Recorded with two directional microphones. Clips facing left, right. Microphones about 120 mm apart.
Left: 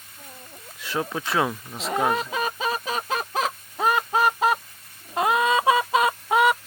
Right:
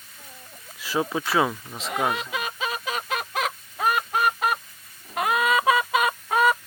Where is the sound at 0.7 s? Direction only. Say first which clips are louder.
Right 2 dB; centre (ahead or behind).